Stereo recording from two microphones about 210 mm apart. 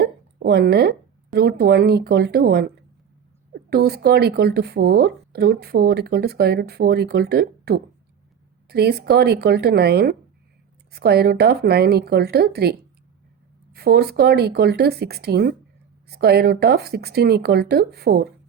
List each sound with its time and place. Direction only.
0.0 s speech: 50° right (ahead or behind)
13.7 s speech: 50° right (ahead or behind)